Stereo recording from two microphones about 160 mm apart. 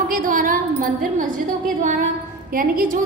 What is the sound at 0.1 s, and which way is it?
Wind chime, 60° right (ahead or behind).